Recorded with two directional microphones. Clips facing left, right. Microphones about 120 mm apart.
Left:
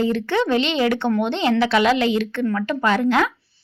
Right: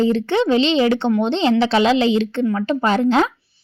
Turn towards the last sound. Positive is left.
turn(degrees=-30)  # may be behind; listen again after turning